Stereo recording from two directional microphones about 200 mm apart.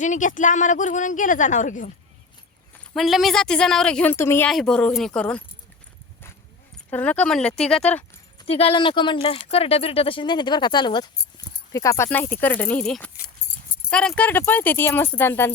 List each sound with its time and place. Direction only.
0.0 s speech: 40° left (ahead or behind)
2.7 s a woman's voice: centre (ahead or behind)
6.9 s a woman's voice: 5° left (ahead or behind)
8.4 s speech: 30° left (ahead or behind); by 15.5 s 10° left (ahead or behind)